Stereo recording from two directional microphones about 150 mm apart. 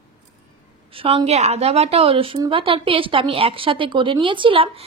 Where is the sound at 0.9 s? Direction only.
40° right (ahead or behind).